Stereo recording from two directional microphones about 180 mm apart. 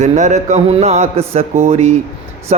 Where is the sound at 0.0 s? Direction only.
40° right (ahead or behind).